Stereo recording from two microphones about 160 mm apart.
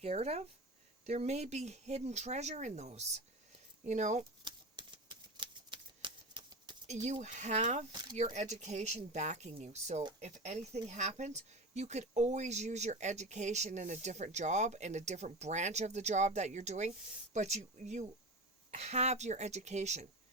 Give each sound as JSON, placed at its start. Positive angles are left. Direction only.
{"t": 0.0, "sound": "speech", "side_deg": -40}
{"t": 4.4, "sound": "typewriter", "side_deg": -30}
{"t": 6.8, "sound": "speech", "side_deg": -45}